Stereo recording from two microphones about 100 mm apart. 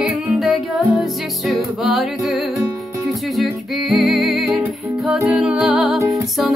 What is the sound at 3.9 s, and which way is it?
Music, centre (ahead or behind).